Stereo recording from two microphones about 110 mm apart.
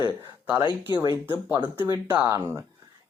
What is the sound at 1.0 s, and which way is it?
Speech, 45° right (ahead or behind).